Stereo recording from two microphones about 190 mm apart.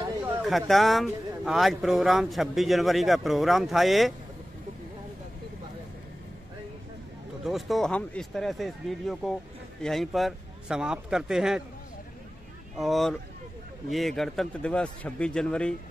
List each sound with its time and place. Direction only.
0.5 s speech: centre (ahead or behind)
7.4 s speech: centre (ahead or behind)
12.7 s speech: centre (ahead or behind)